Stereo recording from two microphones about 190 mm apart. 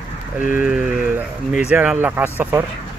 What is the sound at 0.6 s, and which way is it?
Speech, 5° right (ahead or behind).